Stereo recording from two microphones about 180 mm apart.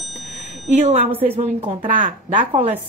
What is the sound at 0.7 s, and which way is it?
Speech, 35° right (ahead or behind).